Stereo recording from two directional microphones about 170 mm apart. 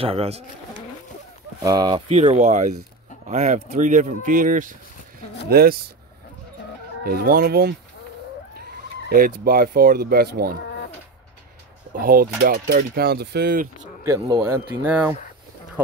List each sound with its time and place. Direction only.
0.0 s speech: 35° right (ahead or behind)
1.6 s speech: 20° right (ahead or behind)
2.0 s speech: 35° right (ahead or behind)
5.5 s speech: 65° right (ahead or behind)
7.1 s speech: 60° right (ahead or behind)
9.1 s speech: 60° right (ahead or behind)
12.0 s speech: 55° right (ahead or behind)
14.0 s speech: 20° right (ahead or behind)